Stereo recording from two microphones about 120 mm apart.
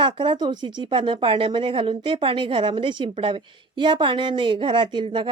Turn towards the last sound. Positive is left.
turn(degrees=-40)  # may be behind; listen again after turning